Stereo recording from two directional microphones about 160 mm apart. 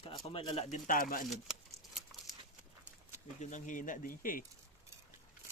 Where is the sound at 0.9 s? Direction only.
60° left (ahead or behind).